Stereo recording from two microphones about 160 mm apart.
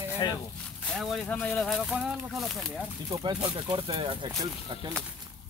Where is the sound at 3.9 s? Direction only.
35° right (ahead or behind).